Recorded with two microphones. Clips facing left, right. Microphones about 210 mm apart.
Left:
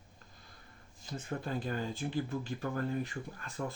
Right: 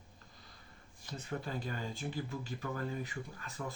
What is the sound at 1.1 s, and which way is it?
Speech, 50° left (ahead or behind).